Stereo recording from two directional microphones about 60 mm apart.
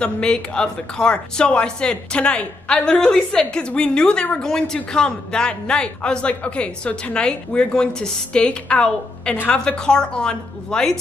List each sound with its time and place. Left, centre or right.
0.0 s speech: centre